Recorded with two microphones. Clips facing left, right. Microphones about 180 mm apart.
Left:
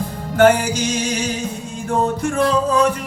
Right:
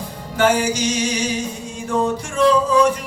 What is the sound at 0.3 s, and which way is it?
Music, 55° left (ahead or behind).